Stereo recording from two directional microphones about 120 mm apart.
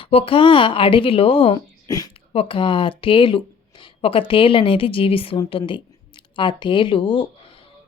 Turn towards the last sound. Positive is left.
turn(degrees=45)  # may be behind; listen again after turning